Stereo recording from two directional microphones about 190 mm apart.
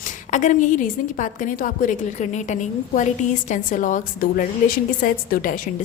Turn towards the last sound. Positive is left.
turn(degrees=45)  # may be behind; listen again after turning